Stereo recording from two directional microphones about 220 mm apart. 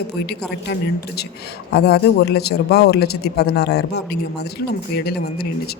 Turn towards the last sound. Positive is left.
turn(degrees=45)  # may be behind; listen again after turning